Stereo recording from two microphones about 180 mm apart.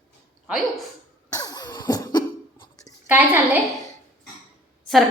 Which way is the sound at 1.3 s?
20° left (ahead or behind).